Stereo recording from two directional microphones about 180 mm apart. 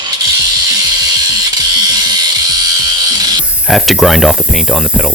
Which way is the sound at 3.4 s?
5° right (ahead or behind).